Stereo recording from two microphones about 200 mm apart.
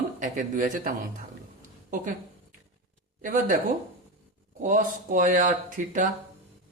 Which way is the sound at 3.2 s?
40° right (ahead or behind).